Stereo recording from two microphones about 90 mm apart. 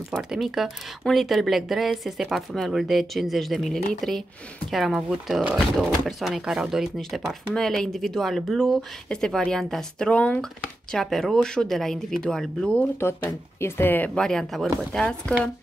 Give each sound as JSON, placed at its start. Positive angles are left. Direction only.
{"t": 0.1, "sound": "speech", "side_deg": -5}
{"t": 5.6, "sound": "speech", "side_deg": 0}
{"t": 10.9, "sound": "speech", "side_deg": 5}
{"t": 12.7, "sound": "speech", "side_deg": 20}
{"t": 14.1, "sound": "speech", "side_deg": 5}